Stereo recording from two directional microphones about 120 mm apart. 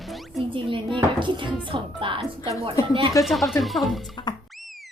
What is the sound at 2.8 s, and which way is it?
Speech, 30° left (ahead or behind).